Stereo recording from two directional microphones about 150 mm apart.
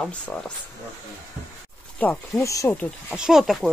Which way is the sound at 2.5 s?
20° left (ahead or behind).